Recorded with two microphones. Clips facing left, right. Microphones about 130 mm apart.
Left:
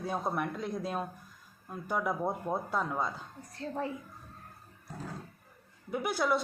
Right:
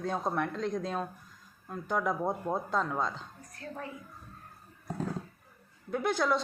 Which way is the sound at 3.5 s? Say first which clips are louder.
Left 6 dB; 25° left (ahead or behind).